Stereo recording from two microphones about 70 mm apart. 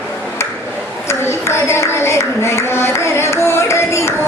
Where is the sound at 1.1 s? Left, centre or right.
Left.